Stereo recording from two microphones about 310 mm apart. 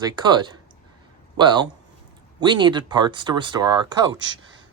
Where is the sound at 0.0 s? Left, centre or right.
Centre.